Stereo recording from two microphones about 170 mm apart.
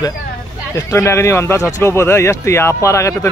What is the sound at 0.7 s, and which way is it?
Speech, 15° left (ahead or behind).